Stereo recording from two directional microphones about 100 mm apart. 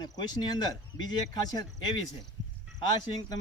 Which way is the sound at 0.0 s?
45° left (ahead or behind).